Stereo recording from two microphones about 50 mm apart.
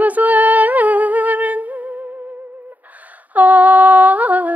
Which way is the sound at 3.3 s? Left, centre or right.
Right.